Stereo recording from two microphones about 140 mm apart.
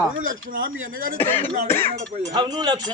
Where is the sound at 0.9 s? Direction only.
80° right.